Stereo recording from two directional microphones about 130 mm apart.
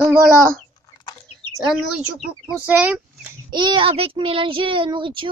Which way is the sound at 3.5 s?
35° right (ahead or behind).